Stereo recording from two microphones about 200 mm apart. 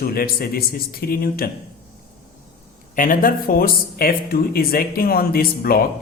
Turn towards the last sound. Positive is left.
turn(degrees=50)  # may be behind; listen again after turning